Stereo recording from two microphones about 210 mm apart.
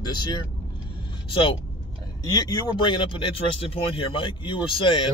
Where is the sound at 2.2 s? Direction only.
20° left (ahead or behind).